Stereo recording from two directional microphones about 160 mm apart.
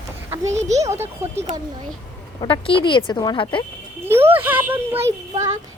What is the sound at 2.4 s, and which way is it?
A woman's voice, 35° left (ahead or behind).